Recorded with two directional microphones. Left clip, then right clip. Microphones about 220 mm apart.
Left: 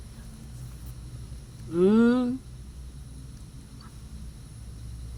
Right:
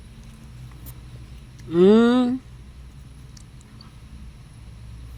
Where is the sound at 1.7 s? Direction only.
40° right (ahead or behind).